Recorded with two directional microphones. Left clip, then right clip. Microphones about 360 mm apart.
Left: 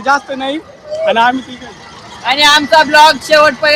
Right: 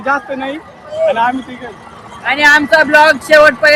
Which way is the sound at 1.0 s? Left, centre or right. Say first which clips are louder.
Left 2 dB; left.